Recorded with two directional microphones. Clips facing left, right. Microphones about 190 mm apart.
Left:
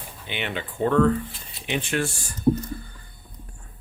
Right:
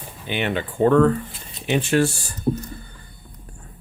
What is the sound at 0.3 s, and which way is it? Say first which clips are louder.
Speech: right 7 dB; 45° right (ahead or behind).